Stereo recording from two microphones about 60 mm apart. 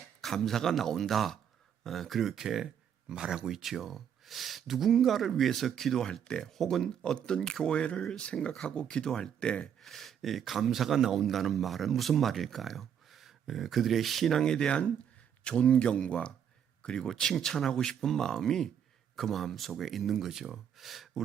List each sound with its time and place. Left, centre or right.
0.2 s a man's voice: centre
9.8 s a man's voice: centre